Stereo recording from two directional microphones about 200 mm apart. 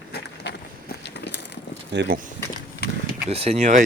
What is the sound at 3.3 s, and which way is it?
Speech, 30° right (ahead or behind).